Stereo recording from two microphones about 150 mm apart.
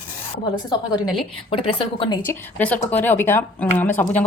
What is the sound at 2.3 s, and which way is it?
Speech, 15° left (ahead or behind).